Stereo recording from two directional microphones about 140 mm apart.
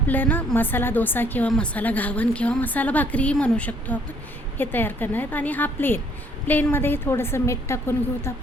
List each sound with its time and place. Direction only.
0.1 s speech: 15° left (ahead or behind)